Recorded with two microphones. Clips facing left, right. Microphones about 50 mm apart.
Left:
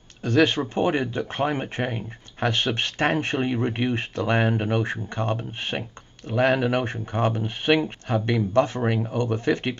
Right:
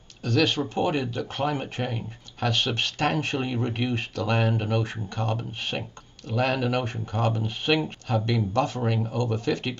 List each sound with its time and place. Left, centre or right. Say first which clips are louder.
0.2 s speech: left 3 dB; left